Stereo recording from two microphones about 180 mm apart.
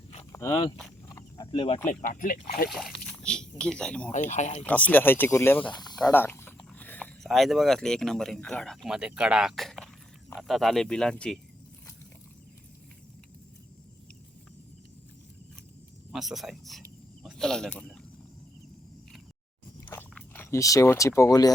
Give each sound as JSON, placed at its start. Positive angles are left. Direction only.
{"t": 0.3, "sound": "speech", "side_deg": 20}
{"t": 1.0, "sound": "a sound", "side_deg": 20}
{"t": 1.9, "sound": "speech", "side_deg": 50}
{"t": 2.6, "sound": "speech", "side_deg": 0}
{"t": 4.3, "sound": "speech", "side_deg": 40}
{"t": 4.6, "sound": "speech", "side_deg": 10}
{"t": 5.6, "sound": "speech", "side_deg": 25}
{"t": 6.0, "sound": "speech", "side_deg": 10}
{"t": 16.1, "sound": "speech", "side_deg": 0}
{"t": 19.8, "sound": "biting", "side_deg": 10}